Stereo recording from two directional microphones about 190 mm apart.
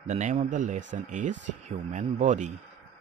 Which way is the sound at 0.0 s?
40° right (ahead or behind).